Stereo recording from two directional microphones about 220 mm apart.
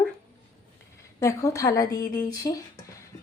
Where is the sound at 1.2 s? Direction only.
15° left (ahead or behind).